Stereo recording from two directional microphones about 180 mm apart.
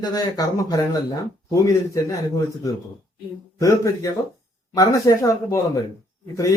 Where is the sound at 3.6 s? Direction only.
20° left (ahead or behind).